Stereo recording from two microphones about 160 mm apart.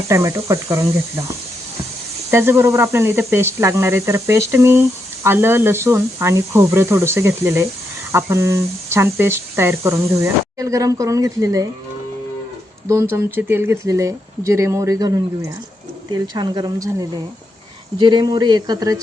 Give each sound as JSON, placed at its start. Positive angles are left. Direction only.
{"t": 0.1, "sound": "speech", "side_deg": -20}
{"t": 2.3, "sound": "speech", "side_deg": -15}
{"t": 12.9, "sound": "speech", "side_deg": -15}